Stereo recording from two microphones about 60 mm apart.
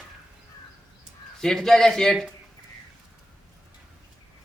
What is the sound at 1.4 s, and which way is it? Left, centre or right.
Speech, centre.